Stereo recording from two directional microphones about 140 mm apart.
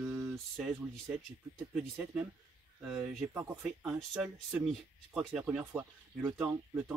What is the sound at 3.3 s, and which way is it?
Speech, 15° right (ahead or behind).